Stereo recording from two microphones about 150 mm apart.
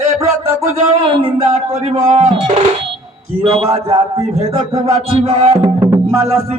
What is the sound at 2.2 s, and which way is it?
Drum, 30° right (ahead or behind).